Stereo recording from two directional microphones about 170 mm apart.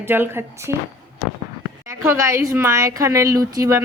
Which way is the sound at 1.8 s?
15° right (ahead or behind).